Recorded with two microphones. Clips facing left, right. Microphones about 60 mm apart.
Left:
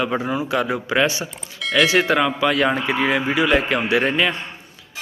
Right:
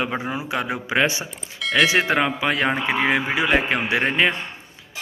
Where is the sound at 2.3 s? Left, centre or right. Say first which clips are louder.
Left 3 dB; right.